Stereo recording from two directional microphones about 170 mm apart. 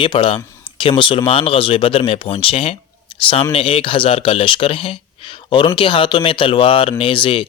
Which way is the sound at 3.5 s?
35° left (ahead or behind).